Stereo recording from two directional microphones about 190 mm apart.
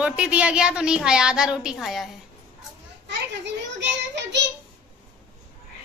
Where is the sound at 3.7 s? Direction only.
65° right (ahead or behind).